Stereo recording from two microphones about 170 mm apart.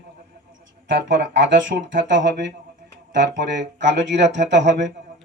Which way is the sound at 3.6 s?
90° right.